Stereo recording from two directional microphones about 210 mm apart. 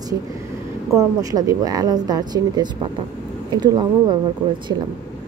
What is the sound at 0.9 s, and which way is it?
Speech, 15° right (ahead or behind).